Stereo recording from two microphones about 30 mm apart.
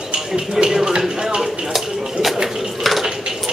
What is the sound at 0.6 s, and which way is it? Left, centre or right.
Speech, right.